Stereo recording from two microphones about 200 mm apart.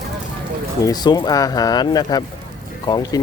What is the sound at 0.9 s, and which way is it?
Speech, 20° left (ahead or behind).